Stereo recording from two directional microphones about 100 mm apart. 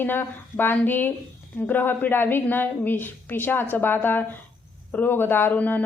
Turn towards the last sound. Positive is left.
turn(degrees=20)  # may be behind; listen again after turning